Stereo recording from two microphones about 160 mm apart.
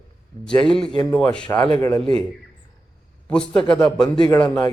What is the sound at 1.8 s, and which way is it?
Speech, 25° left (ahead or behind).